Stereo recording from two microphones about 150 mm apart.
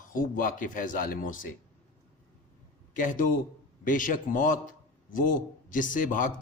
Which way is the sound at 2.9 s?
65° left (ahead or behind).